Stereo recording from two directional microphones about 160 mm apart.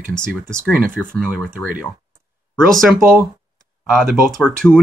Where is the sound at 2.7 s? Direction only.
Centre (ahead or behind).